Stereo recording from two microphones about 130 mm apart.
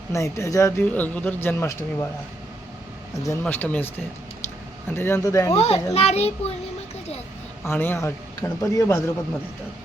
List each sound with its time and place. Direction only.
0.1 s a man's voice: 20° left (ahead or behind)
3.4 s a man's voice: 10° left (ahead or behind)
5.5 s a child's voice: 50° left (ahead or behind)
7.6 s a man's voice: 15° left (ahead or behind)